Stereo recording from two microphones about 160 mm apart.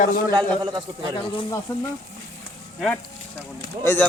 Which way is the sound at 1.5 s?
20° left (ahead or behind).